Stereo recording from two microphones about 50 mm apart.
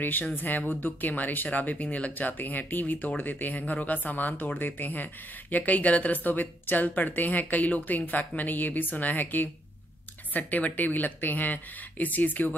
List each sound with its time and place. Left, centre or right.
0.0 s speech: left